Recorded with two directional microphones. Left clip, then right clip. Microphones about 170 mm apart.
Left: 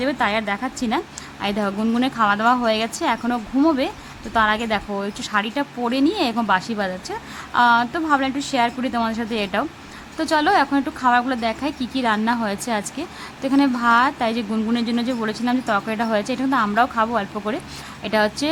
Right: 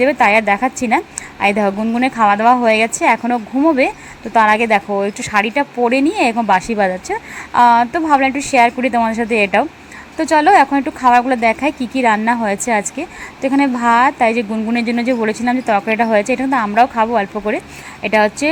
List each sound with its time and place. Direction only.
0.0 s a woman's voice: 20° right (ahead or behind)